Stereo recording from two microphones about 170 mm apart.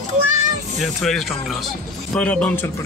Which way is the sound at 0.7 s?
Centre (ahead or behind).